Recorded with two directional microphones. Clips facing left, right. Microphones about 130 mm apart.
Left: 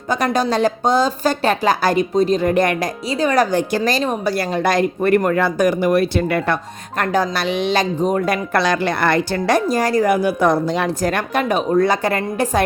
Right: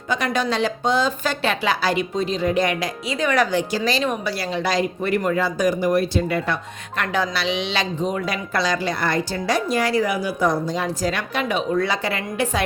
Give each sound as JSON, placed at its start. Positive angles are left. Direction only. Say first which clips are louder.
{"t": 0.1, "sound": "speech", "louder": "left 4 dB", "side_deg": 40}
{"t": 9.6, "sound": "speech", "louder": "left 2 dB", "side_deg": 40}